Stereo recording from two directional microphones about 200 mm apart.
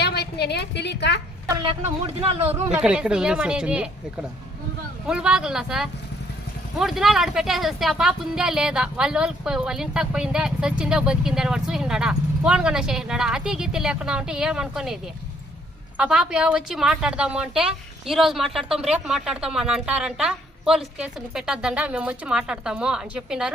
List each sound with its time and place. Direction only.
0.0 s a woman's voice: 55° left (ahead or behind)
1.6 s speech: 30° right (ahead or behind)
2.5 s speech: 5° right (ahead or behind)
5.0 s speech: 5° right (ahead or behind)
16.0 s speech: 5° right (ahead or behind)